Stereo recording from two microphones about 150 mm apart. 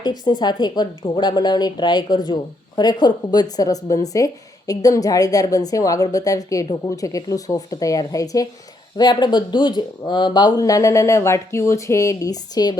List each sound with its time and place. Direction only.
0.0 s speech: 30° left (ahead or behind)